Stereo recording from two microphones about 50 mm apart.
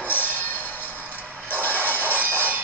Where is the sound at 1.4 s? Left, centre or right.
Left.